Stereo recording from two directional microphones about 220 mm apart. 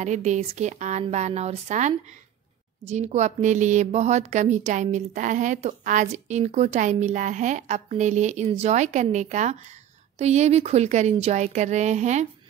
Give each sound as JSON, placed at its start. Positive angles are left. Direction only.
{"t": 0.0, "sound": "a woman's voice", "side_deg": -30}